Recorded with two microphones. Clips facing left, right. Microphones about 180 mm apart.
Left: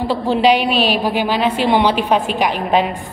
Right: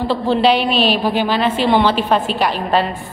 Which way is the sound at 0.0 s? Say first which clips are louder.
Even; 10° left (ahead or behind).